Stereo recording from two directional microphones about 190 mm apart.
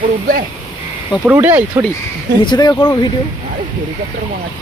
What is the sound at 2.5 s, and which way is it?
Speech, 20° left (ahead or behind).